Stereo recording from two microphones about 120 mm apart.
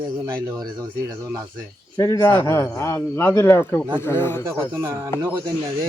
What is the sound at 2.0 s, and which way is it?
A man's voice, 25° left (ahead or behind).